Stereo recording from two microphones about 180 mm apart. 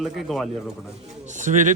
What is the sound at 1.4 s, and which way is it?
Speech, 45° right (ahead or behind).